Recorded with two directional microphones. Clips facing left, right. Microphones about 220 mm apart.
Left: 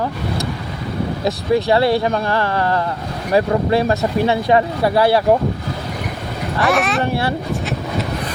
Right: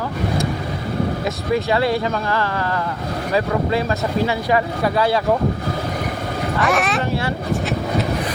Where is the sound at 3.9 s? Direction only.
30° left (ahead or behind).